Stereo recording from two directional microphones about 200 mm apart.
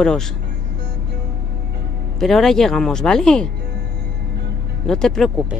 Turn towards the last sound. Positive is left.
turn(degrees=0)  # may be behind; listen again after turning